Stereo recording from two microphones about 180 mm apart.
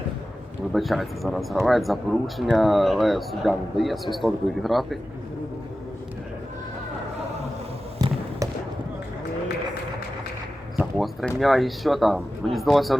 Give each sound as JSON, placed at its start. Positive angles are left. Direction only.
{"t": 0.7, "sound": "speech", "side_deg": 0}
{"t": 7.9, "sound": "trickle", "side_deg": -20}
{"t": 10.8, "sound": "speech", "side_deg": 0}